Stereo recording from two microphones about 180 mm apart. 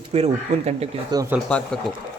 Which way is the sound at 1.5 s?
5° left (ahead or behind).